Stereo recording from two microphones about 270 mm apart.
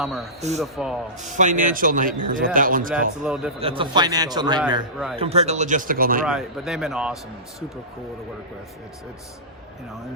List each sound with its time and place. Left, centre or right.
0.0 s speech: centre
1.2 s speech: right
2.9 s speech: centre
3.6 s a man's voice: centre
6.2 s speech: centre